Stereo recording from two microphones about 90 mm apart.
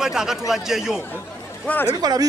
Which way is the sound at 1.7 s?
15° left (ahead or behind).